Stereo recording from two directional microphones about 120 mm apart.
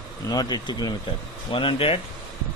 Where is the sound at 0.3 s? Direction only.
35° left (ahead or behind).